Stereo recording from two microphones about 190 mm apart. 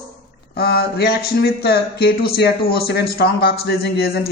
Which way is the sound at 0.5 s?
55° left (ahead or behind).